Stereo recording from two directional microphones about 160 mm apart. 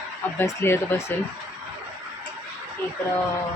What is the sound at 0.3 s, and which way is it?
Speech, 15° left (ahead or behind).